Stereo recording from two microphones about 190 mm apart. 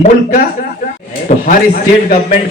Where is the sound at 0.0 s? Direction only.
40° left (ahead or behind).